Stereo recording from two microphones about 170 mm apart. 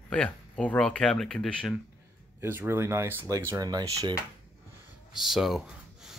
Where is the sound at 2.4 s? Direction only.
15° right (ahead or behind).